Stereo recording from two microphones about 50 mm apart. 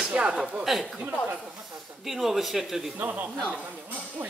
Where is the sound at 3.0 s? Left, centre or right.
Right.